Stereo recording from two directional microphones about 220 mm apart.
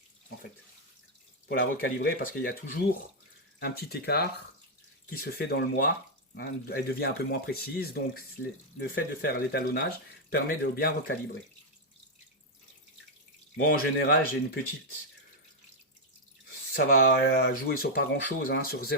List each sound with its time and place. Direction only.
1.5 s speech: 40° left (ahead or behind)
13.7 s speech: 40° left (ahead or behind)
16.7 s speech: 45° left (ahead or behind)